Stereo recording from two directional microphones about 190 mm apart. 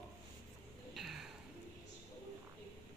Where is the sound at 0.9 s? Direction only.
Centre (ahead or behind).